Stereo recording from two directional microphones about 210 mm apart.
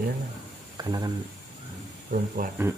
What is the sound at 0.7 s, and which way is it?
Speech, 20° right (ahead or behind).